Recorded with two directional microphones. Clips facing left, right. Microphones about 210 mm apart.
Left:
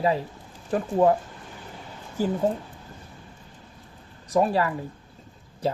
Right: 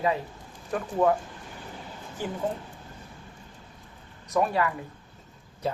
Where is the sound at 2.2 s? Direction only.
40° left (ahead or behind).